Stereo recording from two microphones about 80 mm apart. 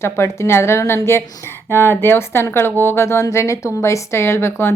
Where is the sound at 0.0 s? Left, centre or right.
Left.